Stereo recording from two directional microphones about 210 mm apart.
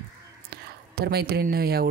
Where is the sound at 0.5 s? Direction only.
50° right (ahead or behind).